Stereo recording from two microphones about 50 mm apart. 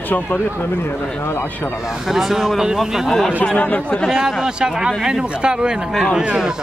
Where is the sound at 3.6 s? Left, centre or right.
Left.